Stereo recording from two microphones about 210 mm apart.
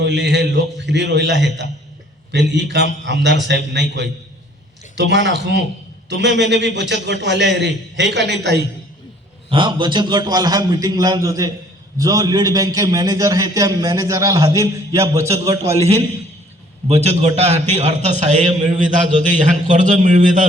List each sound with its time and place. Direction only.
0.0 s a man's voice: 55° right (ahead or behind)
9.5 s a man's voice: 25° right (ahead or behind)
16.9 s a man's voice: 30° right (ahead or behind)